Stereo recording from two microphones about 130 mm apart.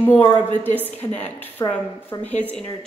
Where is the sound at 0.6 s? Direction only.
15° left (ahead or behind).